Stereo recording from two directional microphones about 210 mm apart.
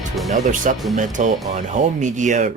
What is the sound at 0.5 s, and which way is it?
Speech, 40° right (ahead or behind).